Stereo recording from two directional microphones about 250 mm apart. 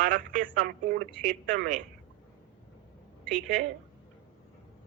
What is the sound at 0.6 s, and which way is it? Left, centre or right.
Speech, right.